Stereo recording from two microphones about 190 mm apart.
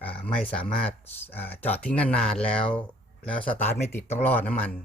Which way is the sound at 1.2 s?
10° left (ahead or behind).